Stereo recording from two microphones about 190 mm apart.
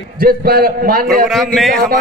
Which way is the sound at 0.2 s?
55° right (ahead or behind).